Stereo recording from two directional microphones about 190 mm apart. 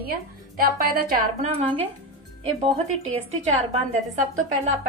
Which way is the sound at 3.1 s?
35° right (ahead or behind).